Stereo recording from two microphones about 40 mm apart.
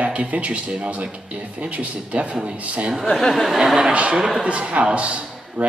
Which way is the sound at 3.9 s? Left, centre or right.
Right.